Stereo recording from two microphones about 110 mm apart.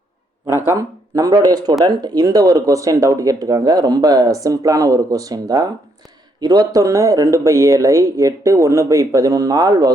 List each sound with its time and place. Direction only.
0.4 s speech: 25° right (ahead or behind)